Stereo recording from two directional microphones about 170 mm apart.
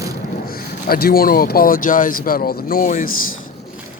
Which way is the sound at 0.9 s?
60° left (ahead or behind).